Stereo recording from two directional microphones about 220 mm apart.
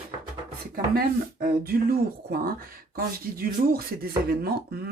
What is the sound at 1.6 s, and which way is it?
Speech, 45° right (ahead or behind).